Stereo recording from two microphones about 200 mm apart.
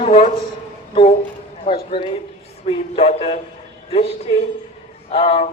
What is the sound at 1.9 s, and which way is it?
A man's voice, 30° left (ahead or behind).